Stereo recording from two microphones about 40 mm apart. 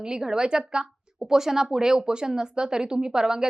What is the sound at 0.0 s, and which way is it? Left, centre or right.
Speech, centre.